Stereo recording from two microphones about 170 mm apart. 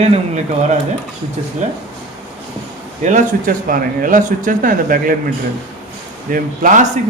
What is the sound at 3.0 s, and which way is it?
Speech, 45° right (ahead or behind).